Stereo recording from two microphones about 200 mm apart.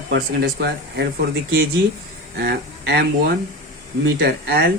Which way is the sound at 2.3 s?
55° right (ahead or behind).